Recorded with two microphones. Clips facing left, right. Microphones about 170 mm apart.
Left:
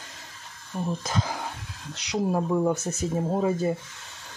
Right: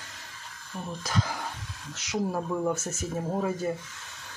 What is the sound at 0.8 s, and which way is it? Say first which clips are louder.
Speech: left 2 dB; 25° left (ahead or behind).